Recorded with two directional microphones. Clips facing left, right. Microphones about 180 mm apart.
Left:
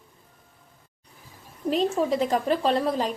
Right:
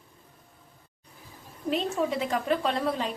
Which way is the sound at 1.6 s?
35° left (ahead or behind).